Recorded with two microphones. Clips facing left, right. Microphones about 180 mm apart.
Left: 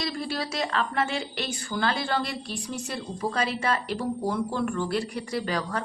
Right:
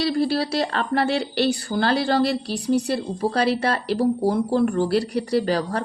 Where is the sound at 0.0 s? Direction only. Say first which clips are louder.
Right 9 dB; 35° right (ahead or behind).